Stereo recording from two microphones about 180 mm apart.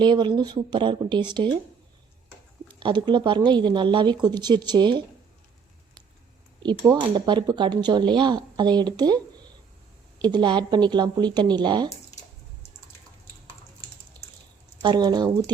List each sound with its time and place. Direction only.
0.0 s speech: 25° right (ahead or behind)
2.6 s speech: 25° right (ahead or behind)
6.6 s speech: 25° right (ahead or behind)
14.8 s speech: 25° right (ahead or behind)